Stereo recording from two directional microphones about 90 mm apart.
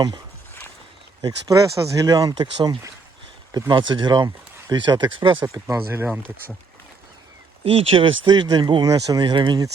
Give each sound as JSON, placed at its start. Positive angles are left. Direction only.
{"t": 1.2, "sound": "speech", "side_deg": -40}
{"t": 5.7, "sound": "speech", "side_deg": -30}
{"t": 7.6, "sound": "speech", "side_deg": -85}